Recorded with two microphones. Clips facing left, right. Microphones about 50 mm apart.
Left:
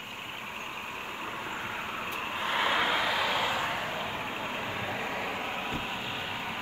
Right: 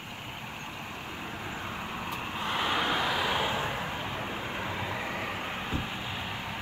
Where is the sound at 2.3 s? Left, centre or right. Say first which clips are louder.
Left 2 dB; centre.